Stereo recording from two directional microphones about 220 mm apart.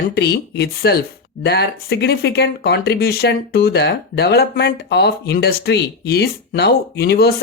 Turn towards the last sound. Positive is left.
turn(degrees=45)  # may be behind; listen again after turning